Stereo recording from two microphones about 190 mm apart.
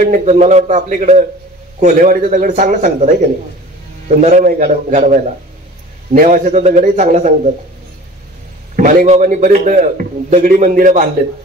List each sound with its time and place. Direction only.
0.0 s a man's voice: 40° right (ahead or behind)
4.2 s a man's voice: 45° right (ahead or behind)
8.7 s a man's voice: 40° right (ahead or behind)